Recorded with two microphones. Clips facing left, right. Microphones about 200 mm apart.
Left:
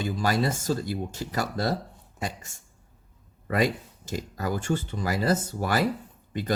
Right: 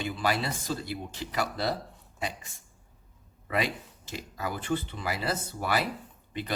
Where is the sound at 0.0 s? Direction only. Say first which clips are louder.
Left 4 dB; 45° left (ahead or behind).